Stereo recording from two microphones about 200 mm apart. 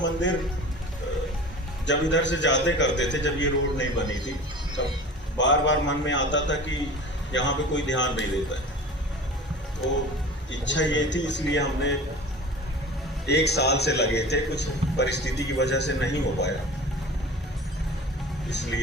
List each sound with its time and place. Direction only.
0.0 s a man's voice: 65° left (ahead or behind)
1.9 s a man's voice: 65° left (ahead or behind)
10.5 s a man's voice: 65° left (ahead or behind)
13.2 s a man's voice: 55° left (ahead or behind)
18.5 s a man's voice: 60° left (ahead or behind)